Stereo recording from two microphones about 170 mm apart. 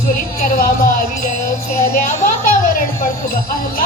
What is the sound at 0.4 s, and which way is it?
Music, 55° left (ahead or behind).